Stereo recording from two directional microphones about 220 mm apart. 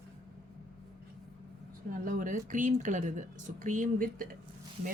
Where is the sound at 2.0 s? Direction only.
35° right (ahead or behind).